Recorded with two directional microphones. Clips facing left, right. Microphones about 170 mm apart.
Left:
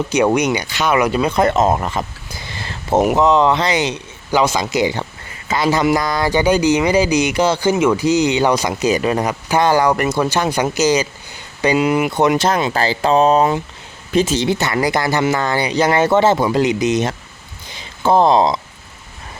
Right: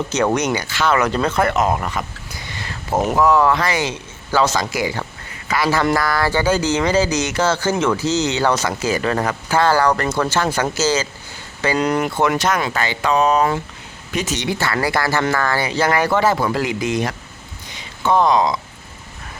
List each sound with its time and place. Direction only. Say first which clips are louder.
0.1 s speech: left 4 dB; 15° left (ahead or behind); by 2.0 s 30° left (ahead or behind)
2.5 s a sound: left 4 dB; 30° left (ahead or behind)
3.2 s speech: left 2 dB; 20° left (ahead or behind)
17.7 s speech: left 3 dB; 30° left (ahead or behind)